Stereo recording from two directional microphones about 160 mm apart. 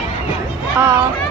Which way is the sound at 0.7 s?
15° right (ahead or behind).